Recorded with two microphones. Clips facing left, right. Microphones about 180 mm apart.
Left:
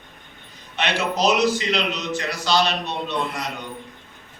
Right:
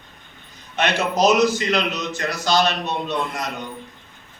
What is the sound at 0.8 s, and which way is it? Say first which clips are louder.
A man's voice: right 3 dB; 45° right (ahead or behind).